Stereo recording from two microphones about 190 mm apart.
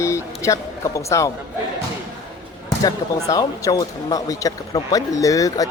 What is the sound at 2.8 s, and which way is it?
Speech, 20° left (ahead or behind).